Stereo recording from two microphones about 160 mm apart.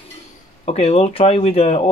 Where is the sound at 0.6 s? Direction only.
40° left (ahead or behind).